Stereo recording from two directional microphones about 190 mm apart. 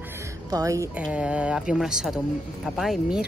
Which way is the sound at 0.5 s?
15° right (ahead or behind).